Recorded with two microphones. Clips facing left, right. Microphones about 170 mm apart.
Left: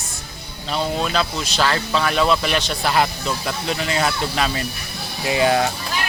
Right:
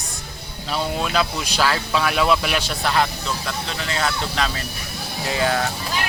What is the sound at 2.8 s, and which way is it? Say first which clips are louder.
Speech: left 1 dB; 10° left (ahead or behind).